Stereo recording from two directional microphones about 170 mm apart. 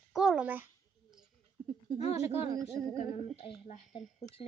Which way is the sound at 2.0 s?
40° left (ahead or behind).